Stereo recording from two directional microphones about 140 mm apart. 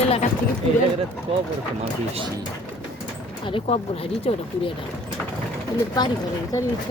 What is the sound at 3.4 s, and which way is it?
Speech, 40° left (ahead or behind).